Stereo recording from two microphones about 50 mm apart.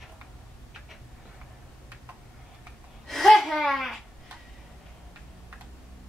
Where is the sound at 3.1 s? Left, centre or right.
Centre.